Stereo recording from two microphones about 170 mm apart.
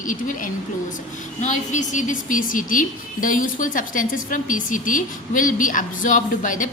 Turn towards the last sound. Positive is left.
turn(degrees=50)  # may be behind; listen again after turning